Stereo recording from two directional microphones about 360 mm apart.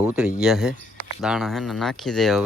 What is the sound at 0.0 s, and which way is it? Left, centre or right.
Speech, centre.